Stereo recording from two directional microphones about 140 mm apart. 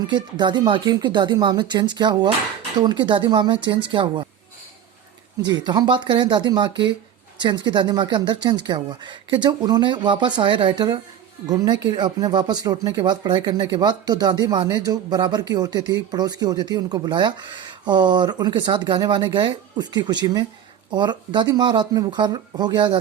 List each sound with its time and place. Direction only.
0.0 s speech: 30° right (ahead or behind)
5.5 s speech: 30° right (ahead or behind)